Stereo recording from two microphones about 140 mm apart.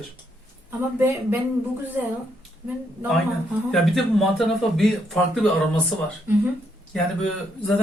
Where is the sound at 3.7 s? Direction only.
Centre (ahead or behind).